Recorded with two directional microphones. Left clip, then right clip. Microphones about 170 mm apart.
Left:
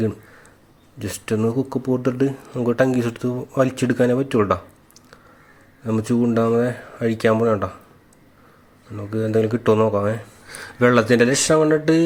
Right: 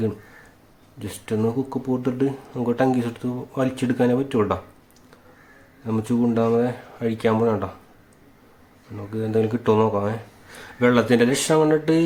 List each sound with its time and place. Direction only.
0.9 s speech: 20° left (ahead or behind)
5.8 s speech: 20° left (ahead or behind)
9.0 s speech: 20° left (ahead or behind)